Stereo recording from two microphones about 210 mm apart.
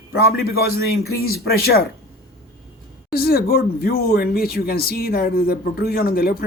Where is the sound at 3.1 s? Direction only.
45° left (ahead or behind).